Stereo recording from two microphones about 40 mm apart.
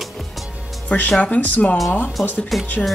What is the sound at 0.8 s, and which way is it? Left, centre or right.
Speech, left.